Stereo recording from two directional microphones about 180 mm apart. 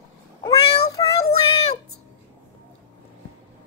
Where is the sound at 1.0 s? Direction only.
20° left (ahead or behind).